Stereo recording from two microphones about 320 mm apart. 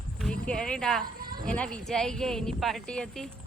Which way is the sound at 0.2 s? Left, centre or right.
Centre.